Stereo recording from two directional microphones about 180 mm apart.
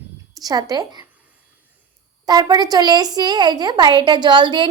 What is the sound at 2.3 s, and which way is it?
A woman's voice, 20° right (ahead or behind).